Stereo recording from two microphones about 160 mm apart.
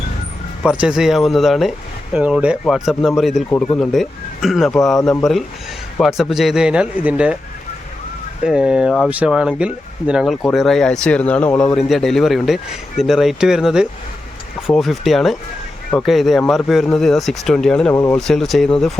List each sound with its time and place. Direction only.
0.6 s speech: 5° right (ahead or behind)
8.4 s speech: 5° right (ahead or behind)
17.9 s speech: 20° left (ahead or behind)
18.2 s speech: centre (ahead or behind)